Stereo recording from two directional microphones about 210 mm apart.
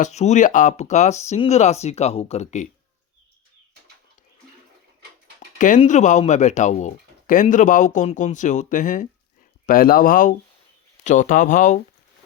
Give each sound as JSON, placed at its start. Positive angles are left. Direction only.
{"t": 0.0, "sound": "speech", "side_deg": 30}
{"t": 5.4, "sound": "speech", "side_deg": 35}